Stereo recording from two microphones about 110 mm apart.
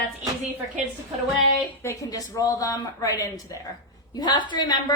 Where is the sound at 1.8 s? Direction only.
30° left (ahead or behind).